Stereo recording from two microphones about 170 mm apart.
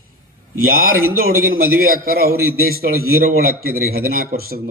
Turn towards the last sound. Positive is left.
turn(degrees=-60)  # may be behind; listen again after turning